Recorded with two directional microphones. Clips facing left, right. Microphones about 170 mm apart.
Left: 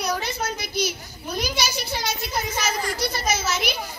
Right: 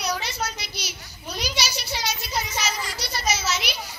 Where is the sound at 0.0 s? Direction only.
50° left (ahead or behind).